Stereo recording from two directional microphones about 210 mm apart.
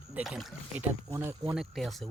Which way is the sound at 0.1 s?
Centre (ahead or behind).